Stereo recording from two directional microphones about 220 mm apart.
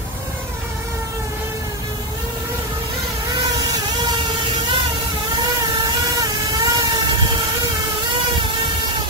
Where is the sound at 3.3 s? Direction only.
15° right (ahead or behind).